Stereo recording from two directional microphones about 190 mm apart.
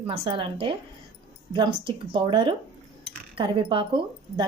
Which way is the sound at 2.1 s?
25° right (ahead or behind).